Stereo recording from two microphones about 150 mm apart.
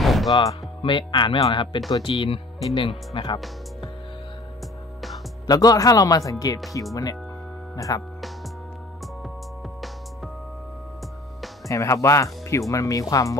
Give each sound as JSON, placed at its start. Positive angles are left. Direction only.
{"t": 0.0, "sound": "music", "side_deg": 0}
{"t": 0.3, "sound": "speech", "side_deg": 25}
{"t": 5.5, "sound": "speech", "side_deg": 25}
{"t": 11.6, "sound": "speech", "side_deg": 20}